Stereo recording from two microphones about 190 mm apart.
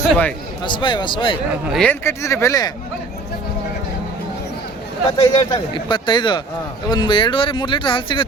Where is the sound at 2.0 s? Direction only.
15° left (ahead or behind).